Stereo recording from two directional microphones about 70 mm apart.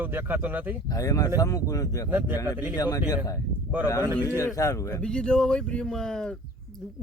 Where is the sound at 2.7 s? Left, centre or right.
Left.